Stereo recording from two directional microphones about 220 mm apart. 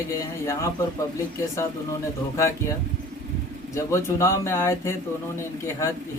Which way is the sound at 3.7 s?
15° left (ahead or behind).